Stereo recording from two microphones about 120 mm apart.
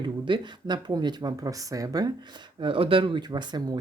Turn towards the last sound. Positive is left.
turn(degrees=-35)  # may be behind; listen again after turning